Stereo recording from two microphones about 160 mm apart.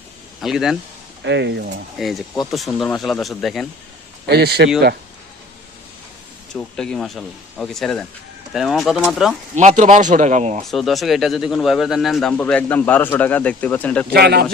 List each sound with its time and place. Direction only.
0.4 s speech: centre (ahead or behind)
1.2 s speech: 90° right
2.0 s speech: centre (ahead or behind)
4.3 s speech: 90° right
6.5 s speech: 5° left (ahead or behind)
9.6 s speech: 50° right (ahead or behind)
10.6 s a man's voice: centre (ahead or behind)
14.1 s speech: 80° right